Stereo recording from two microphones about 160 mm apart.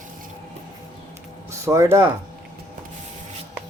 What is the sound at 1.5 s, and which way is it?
Speech, 20° right (ahead or behind).